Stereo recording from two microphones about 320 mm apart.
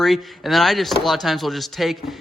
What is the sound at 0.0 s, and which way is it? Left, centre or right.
Speech, centre.